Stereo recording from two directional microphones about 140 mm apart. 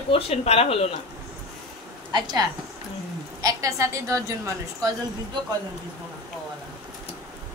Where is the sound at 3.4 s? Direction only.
20° right (ahead or behind).